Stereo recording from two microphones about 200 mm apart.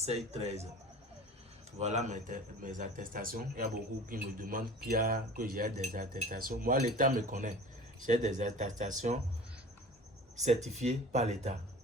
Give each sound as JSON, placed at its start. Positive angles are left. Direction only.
{"t": 0.0, "sound": "speech", "side_deg": -30}
{"t": 1.8, "sound": "speech", "side_deg": -35}
{"t": 10.3, "sound": "speech", "side_deg": -35}